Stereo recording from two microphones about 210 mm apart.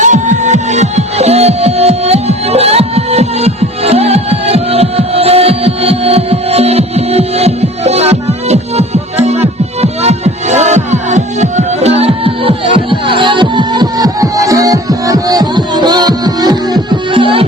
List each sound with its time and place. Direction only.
0.0 s music: 35° right (ahead or behind)